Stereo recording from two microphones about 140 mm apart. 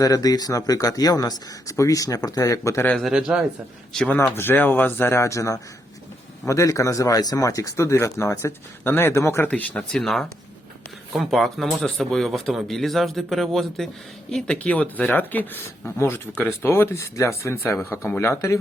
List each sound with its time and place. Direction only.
0.0 s speech: 25° left (ahead or behind)
2.9 s speech: centre (ahead or behind)
4.2 s speech: 15° left (ahead or behind)